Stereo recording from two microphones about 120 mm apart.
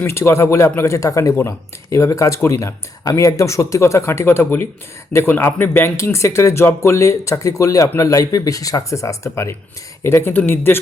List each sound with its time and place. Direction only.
0.0 s speech: 20° left (ahead or behind)